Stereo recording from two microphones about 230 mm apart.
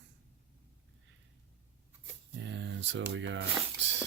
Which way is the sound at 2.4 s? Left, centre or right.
Right.